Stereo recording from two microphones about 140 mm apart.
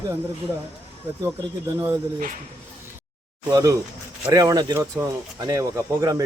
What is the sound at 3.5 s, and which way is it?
Speech, 25° right (ahead or behind).